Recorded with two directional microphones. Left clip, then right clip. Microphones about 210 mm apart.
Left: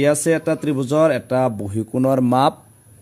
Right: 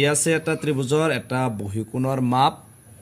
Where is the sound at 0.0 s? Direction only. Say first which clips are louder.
Left 4 dB; 50° left (ahead or behind).